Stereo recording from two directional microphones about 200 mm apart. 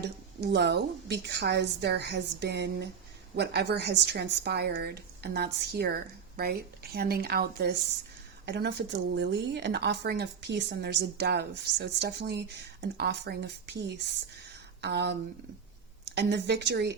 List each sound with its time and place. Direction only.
0.0 s a woman's voice: 55° right (ahead or behind)
14.8 s a woman's voice: 55° right (ahead or behind)